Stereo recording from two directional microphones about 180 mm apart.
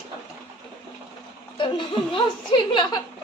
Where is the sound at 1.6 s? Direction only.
30° left (ahead or behind).